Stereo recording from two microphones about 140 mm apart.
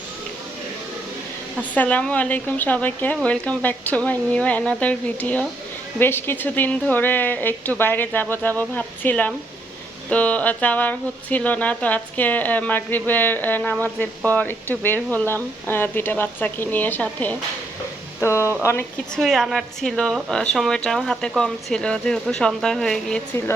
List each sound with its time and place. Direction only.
1.7 s speech: 10° left (ahead or behind)
19.1 s a woman's voice: centre (ahead or behind)